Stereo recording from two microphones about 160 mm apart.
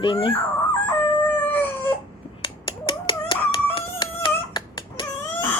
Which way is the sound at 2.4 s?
30° left (ahead or behind).